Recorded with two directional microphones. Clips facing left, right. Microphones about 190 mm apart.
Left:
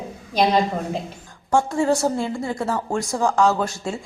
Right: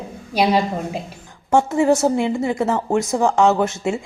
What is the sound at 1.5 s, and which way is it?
A woman's voice, 20° right (ahead or behind).